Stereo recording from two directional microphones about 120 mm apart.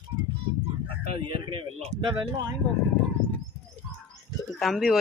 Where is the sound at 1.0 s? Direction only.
45° right (ahead or behind).